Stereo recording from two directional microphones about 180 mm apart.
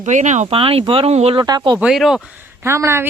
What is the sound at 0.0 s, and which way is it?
Speech, 40° right (ahead or behind).